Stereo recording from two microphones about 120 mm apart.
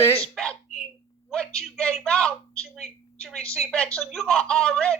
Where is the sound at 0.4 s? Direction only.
5° left (ahead or behind).